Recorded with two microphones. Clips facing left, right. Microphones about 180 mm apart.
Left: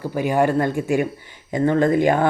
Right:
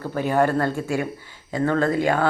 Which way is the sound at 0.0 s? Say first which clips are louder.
Left 1 dB; 10° left (ahead or behind).